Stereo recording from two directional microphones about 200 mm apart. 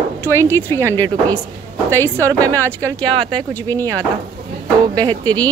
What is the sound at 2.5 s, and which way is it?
Speech, 15° right (ahead or behind).